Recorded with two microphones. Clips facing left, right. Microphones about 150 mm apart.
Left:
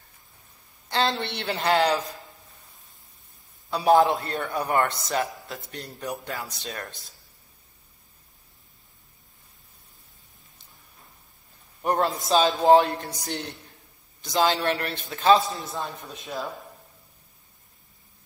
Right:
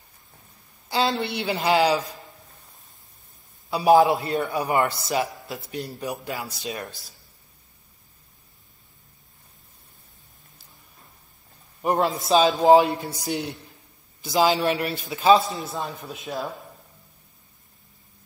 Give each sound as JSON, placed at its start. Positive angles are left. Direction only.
{"t": 0.8, "sound": "a man's voice", "side_deg": -5}
{"t": 3.7, "sound": "a man's voice", "side_deg": -5}
{"t": 11.8, "sound": "a man's voice", "side_deg": 0}